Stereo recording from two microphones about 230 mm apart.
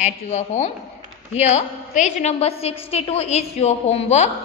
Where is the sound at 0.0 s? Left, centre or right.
Left.